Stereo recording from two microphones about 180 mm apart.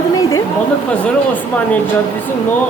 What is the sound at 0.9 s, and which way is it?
Speech, 10° left (ahead or behind).